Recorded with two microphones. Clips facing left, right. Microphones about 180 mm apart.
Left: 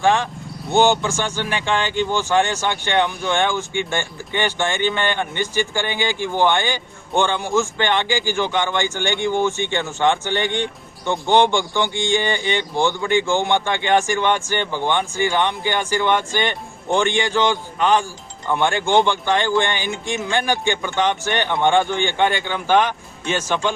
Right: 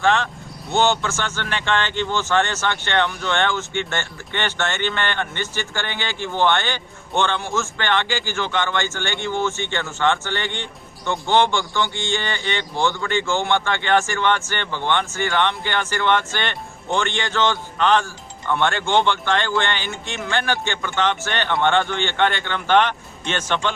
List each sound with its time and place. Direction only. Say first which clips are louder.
0.0 s speech: left 2 dB; 15° left (ahead or behind)